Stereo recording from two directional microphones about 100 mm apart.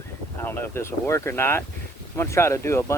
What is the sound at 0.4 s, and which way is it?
Speech, 20° left (ahead or behind).